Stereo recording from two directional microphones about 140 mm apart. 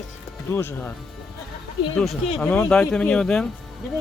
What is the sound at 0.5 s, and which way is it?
Speech, 15° left (ahead or behind).